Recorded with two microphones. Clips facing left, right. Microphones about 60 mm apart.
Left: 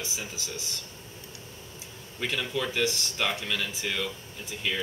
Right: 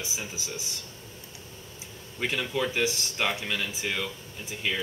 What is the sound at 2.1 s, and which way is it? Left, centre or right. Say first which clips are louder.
Speech: right 2 dB; centre.